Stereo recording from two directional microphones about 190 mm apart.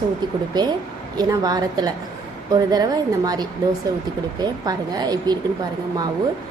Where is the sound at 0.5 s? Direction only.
20° right (ahead or behind).